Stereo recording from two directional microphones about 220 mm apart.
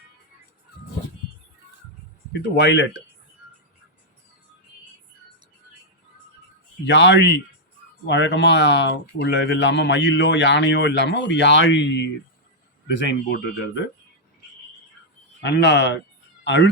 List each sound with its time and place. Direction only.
2.6 s speech: 55° left (ahead or behind)
6.8 s speech: 55° left (ahead or behind)
15.4 s speech: 50° left (ahead or behind)